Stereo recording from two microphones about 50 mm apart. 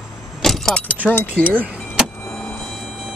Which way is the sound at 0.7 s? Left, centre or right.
Left.